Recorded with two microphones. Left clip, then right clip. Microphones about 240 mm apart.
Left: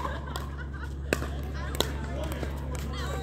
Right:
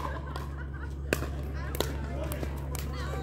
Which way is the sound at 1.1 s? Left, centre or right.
Centre.